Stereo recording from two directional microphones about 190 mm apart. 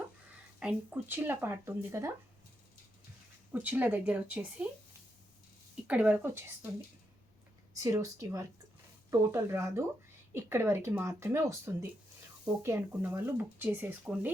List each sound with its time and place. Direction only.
0.6 s speech: 5° right (ahead or behind)
3.5 s speech: 10° right (ahead or behind)
5.9 s speech: 5° right (ahead or behind)
7.8 s speech: 15° right (ahead or behind)